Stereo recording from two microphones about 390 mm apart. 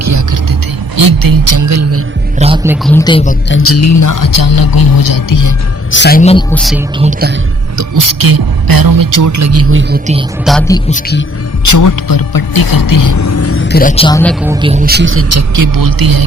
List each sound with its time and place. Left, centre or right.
0.0 s music: right
0.9 s a man's voice: right
2.4 s speech: centre
2.8 s speech: centre
3.5 s speech: left
5.9 s a woman's voice: left
6.5 s speech: centre
7.0 s a woman's voice: right
7.8 s a man's voice: right
10.4 s speech: centre
10.8 s a woman's voice: centre
11.6 s speech: left; by 14.3 s centre
14.4 s a man's voice: centre; by 16.2 s right